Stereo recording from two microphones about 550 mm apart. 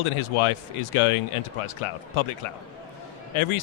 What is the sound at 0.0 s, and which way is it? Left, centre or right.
Speech, left.